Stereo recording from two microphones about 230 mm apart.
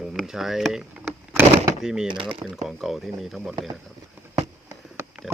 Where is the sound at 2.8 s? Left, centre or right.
Centre.